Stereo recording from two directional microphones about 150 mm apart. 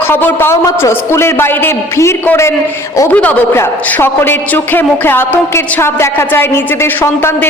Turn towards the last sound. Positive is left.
turn(degrees=15)  # may be behind; listen again after turning